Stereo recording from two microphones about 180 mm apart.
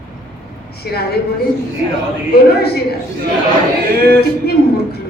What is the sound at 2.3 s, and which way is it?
Speech, 60° left (ahead or behind).